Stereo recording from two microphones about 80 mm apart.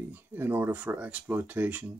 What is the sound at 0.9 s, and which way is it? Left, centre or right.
Speech, centre.